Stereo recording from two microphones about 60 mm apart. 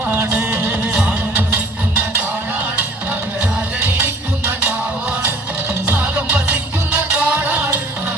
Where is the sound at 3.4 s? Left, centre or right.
Right.